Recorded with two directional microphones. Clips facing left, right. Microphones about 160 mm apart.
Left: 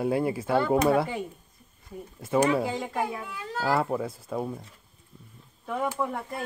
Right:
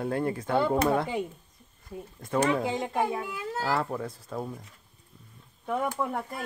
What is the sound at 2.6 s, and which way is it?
Speech, 20° right (ahead or behind).